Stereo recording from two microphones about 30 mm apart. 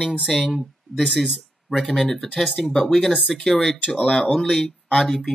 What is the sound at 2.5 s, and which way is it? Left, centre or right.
Speech, left.